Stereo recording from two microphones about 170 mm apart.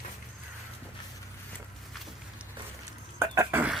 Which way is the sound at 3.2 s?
15° right (ahead or behind).